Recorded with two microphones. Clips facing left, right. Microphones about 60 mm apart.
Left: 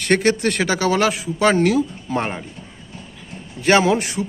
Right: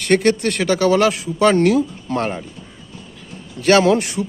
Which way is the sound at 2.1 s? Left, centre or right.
Centre.